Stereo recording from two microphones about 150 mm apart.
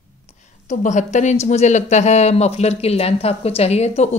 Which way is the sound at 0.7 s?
55° left (ahead or behind).